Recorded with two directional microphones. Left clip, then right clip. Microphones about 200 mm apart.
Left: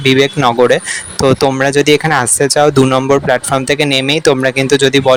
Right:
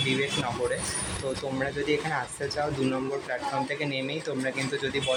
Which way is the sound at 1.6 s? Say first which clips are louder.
Left 18 dB; 45° left (ahead or behind).